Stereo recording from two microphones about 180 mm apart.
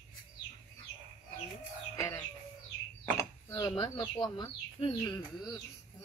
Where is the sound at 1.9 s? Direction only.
15° left (ahead or behind).